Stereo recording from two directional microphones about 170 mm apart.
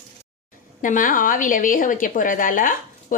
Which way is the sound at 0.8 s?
50° left (ahead or behind).